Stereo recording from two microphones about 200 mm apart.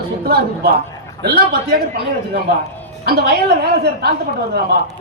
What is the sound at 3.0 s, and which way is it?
Speech, 55° right (ahead or behind).